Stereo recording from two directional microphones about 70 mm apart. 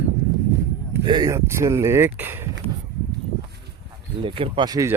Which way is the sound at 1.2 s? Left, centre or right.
Right.